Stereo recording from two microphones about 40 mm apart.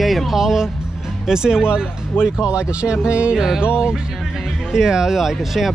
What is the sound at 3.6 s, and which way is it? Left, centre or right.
Speech, right.